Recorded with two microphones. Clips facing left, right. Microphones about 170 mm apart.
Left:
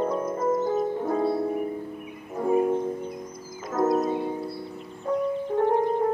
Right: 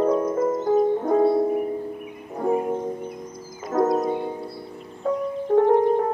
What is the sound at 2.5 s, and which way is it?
Music, 25° right (ahead or behind).